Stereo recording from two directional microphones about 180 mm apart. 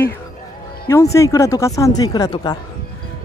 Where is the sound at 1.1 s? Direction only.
15° left (ahead or behind).